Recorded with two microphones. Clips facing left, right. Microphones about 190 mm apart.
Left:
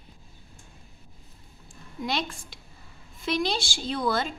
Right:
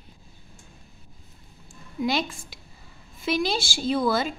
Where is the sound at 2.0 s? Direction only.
5° right (ahead or behind).